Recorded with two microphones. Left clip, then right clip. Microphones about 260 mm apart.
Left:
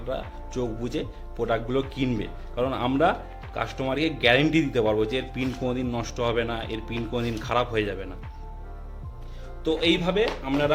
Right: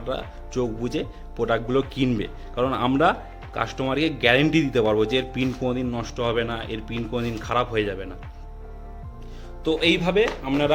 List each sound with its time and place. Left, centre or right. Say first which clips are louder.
0.0 s speech: right 2 dB; centre
9.6 s speech: right 2 dB; centre